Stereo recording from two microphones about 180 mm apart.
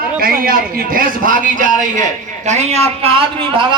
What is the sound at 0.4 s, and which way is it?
A man's voice, 50° right (ahead or behind).